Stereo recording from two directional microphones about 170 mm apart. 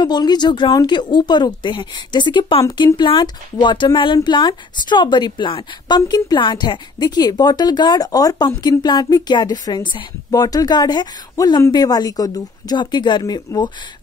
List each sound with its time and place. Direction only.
0.0 s speech: 25° left (ahead or behind)